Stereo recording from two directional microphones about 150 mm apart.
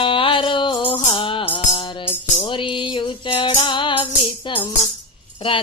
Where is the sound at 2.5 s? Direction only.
35° left (ahead or behind).